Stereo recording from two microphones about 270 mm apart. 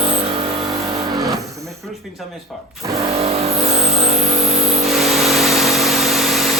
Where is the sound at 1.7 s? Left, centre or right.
Centre.